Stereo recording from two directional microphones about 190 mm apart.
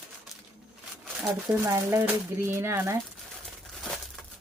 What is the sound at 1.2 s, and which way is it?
Speech, 15° right (ahead or behind).